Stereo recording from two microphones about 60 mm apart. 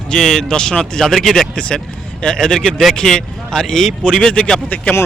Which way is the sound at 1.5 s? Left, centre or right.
Centre.